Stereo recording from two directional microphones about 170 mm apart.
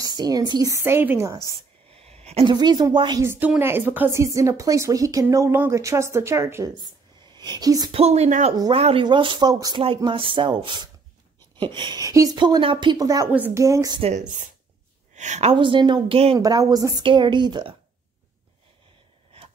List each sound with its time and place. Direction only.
0.0 s speech: 25° right (ahead or behind)
1.5 s a woman's voice: 35° right (ahead or behind)
3.2 s speech: 10° right (ahead or behind)
7.9 s speech: 40° right (ahead or behind); by 14.0 s 20° right (ahead or behind)
15.1 s a woman's voice: 45° right (ahead or behind)
15.5 s speech: 30° right (ahead or behind)
16.3 s speech: 20° right (ahead or behind)